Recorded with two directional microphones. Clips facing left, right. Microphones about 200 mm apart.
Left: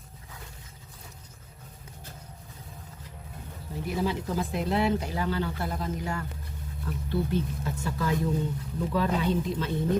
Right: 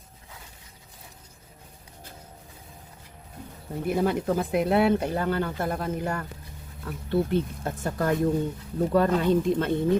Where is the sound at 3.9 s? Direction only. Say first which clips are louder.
Right 5 dB; 55° right (ahead or behind).